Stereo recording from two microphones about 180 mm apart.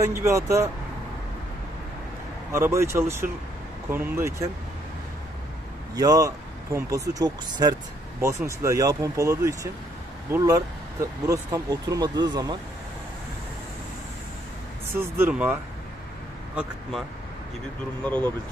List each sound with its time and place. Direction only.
0.0 s speech: 15° right (ahead or behind)
2.5 s speech: 15° right (ahead or behind)
5.9 s speech: 20° right (ahead or behind)
15.0 s speech: 10° right (ahead or behind)
18.0 s speech: 5° left (ahead or behind)